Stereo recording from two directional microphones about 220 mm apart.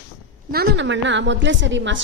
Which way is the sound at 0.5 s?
50° right (ahead or behind).